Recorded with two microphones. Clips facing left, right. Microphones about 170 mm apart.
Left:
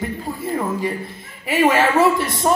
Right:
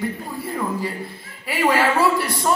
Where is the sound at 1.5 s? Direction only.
20° left (ahead or behind).